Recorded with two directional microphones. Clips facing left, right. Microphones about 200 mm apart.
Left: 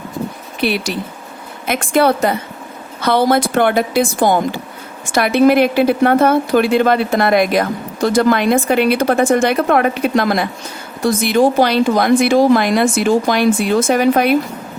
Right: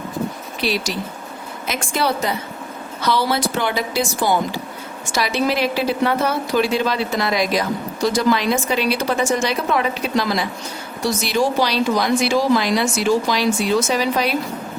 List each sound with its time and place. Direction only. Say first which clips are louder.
0.6 s a woman's voice: left 4 dB; 55° left (ahead or behind)